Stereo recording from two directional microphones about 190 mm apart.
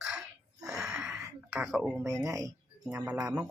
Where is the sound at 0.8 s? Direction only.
5° right (ahead or behind).